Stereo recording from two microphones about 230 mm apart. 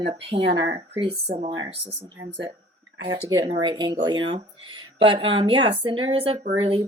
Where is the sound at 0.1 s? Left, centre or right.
Right.